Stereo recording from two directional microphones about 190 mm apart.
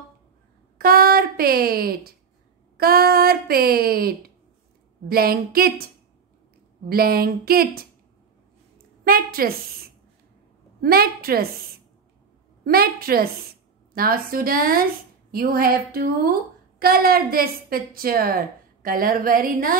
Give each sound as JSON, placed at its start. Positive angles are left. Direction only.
{"t": 0.7, "sound": "a woman's voice", "side_deg": -50}
{"t": 6.9, "sound": "a woman's voice", "side_deg": -55}
{"t": 9.0, "sound": "a woman's voice", "side_deg": -50}
{"t": 10.8, "sound": "a woman's voice", "side_deg": -50}
{"t": 12.6, "sound": "a woman's voice", "side_deg": -50}